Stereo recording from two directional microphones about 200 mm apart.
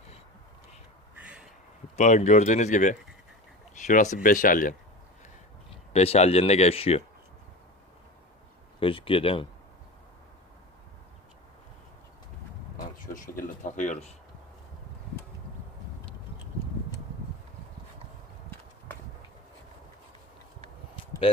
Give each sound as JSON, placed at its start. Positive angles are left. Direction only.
{"t": 2.0, "sound": "speech", "side_deg": 35}
{"t": 5.9, "sound": "speech", "side_deg": 30}
{"t": 8.8, "sound": "speech", "side_deg": 25}
{"t": 13.1, "sound": "a sound", "side_deg": 40}